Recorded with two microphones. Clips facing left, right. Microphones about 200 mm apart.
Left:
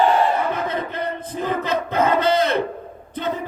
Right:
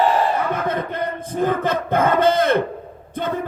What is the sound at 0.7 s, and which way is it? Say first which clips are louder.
Crowd: right 1 dB; 50° right (ahead or behind).